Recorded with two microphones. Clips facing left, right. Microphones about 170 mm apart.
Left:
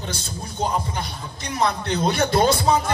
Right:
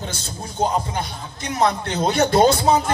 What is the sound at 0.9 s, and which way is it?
Speech, 50° right (ahead or behind).